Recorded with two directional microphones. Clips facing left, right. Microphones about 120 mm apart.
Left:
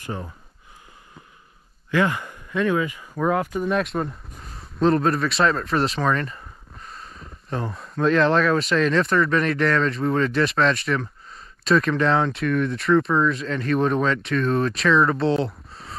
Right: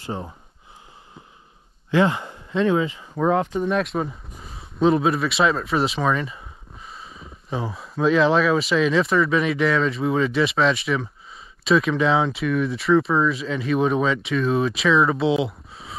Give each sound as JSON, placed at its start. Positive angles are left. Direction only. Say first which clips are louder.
{"t": 1.9, "sound": "speech", "louder": "right 2 dB", "side_deg": -20}
{"t": 3.6, "sound": "speech", "louder": "right 1 dB", "side_deg": 0}